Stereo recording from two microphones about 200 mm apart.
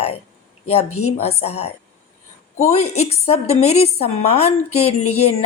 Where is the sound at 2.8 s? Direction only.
30° left (ahead or behind).